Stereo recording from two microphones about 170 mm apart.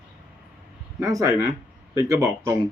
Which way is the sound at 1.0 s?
20° right (ahead or behind).